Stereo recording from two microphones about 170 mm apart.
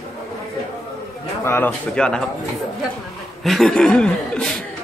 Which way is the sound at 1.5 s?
15° left (ahead or behind).